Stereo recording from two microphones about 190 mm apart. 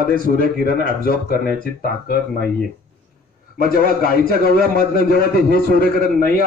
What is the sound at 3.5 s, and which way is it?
A man's voice, 50° left (ahead or behind).